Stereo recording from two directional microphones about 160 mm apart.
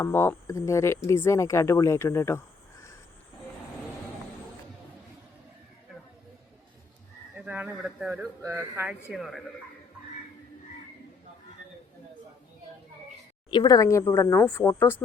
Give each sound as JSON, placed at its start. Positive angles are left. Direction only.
{"t": 0.0, "sound": "speech", "side_deg": 15}
{"t": 7.3, "sound": "a man's voice", "side_deg": -10}
{"t": 9.1, "sound": "speech", "side_deg": 0}
{"t": 13.5, "sound": "speech", "side_deg": 25}